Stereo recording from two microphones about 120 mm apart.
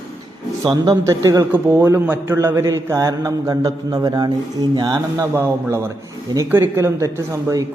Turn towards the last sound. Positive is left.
turn(degrees=-25)  # may be behind; listen again after turning